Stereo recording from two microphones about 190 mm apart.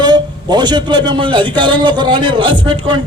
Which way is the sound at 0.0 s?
20° right (ahead or behind).